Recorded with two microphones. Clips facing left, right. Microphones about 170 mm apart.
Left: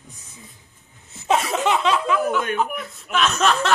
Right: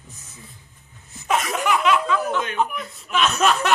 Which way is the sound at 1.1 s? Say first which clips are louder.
Left 2 dB; 30° left (ahead or behind).